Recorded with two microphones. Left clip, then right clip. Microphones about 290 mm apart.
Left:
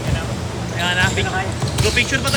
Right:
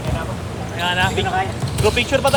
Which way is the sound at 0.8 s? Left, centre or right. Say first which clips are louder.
Even; centre.